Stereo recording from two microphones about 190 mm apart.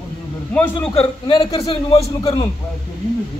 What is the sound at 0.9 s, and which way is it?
A man's voice, 25° left (ahead or behind).